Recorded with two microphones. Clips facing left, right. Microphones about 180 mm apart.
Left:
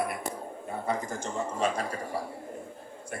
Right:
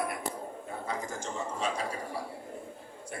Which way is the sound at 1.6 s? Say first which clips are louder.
Left 5 dB; 50° left (ahead or behind).